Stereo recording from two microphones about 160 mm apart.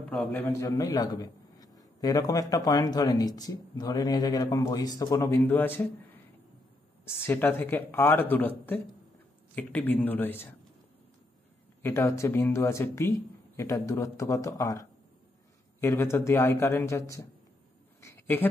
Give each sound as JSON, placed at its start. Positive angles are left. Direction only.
{"t": 0.0, "sound": "a man's voice", "side_deg": 10}
{"t": 7.1, "sound": "speech", "side_deg": 15}
{"t": 11.8, "sound": "a man's voice", "side_deg": 20}
{"t": 18.0, "sound": "a sound", "side_deg": 15}